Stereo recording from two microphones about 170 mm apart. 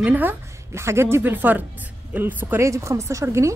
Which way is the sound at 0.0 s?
10° right (ahead or behind).